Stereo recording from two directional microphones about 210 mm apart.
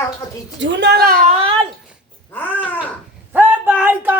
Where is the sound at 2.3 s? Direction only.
10° left (ahead or behind).